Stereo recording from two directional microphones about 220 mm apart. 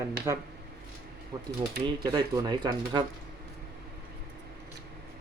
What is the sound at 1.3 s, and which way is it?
Speech, 15° right (ahead or behind).